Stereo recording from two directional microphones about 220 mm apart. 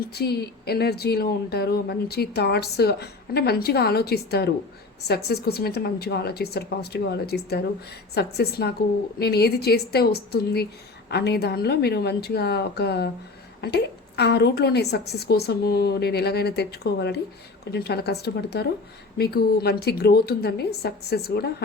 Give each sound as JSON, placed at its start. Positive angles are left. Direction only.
{"t": 0.1, "sound": "speech", "side_deg": 45}